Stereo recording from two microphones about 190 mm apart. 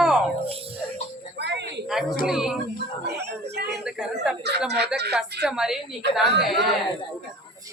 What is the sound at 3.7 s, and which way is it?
Speech, 5° right (ahead or behind).